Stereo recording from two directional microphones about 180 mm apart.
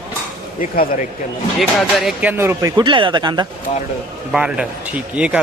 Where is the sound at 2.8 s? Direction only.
25° right (ahead or behind).